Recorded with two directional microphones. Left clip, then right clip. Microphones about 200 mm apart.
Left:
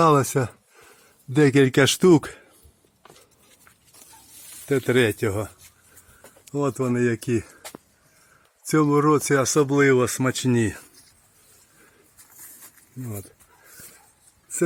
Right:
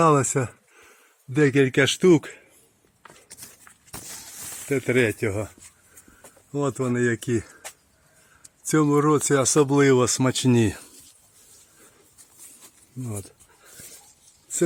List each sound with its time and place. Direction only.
0.0 s speech: centre (ahead or behind)
0.9 s speech: 15° left (ahead or behind)
4.7 s speech: 10° left (ahead or behind)
8.6 s speech: centre (ahead or behind)
9.2 s speech: 15° right (ahead or behind)